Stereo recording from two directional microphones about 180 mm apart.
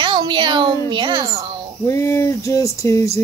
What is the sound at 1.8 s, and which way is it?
Speech, 15° left (ahead or behind).